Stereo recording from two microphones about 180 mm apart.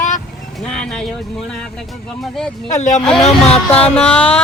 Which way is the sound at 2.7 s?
40° left (ahead or behind).